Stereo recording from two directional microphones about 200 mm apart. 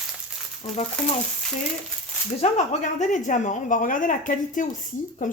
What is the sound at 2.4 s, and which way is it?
A woman's voice, 35° left (ahead or behind).